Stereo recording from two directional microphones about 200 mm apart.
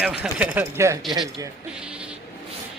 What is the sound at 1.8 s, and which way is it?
Bleat, 5° right (ahead or behind).